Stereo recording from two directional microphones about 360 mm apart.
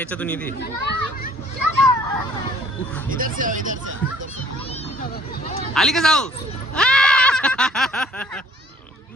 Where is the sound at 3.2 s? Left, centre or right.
Right.